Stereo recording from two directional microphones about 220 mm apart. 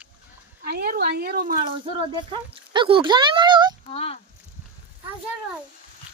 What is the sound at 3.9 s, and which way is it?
Speech, 25° left (ahead or behind).